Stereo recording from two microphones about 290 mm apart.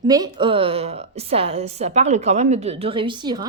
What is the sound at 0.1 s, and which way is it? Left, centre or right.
A woman's voice, centre.